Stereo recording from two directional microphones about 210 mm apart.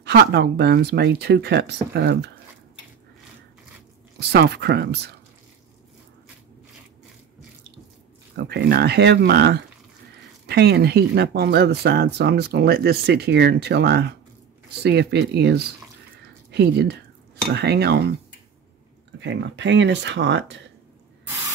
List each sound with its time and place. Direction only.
0.0 s speech: 50° right (ahead or behind)
4.2 s speech: 50° right (ahead or behind)
8.4 s speech: 50° right (ahead or behind)
19.1 s speech: 60° right (ahead or behind)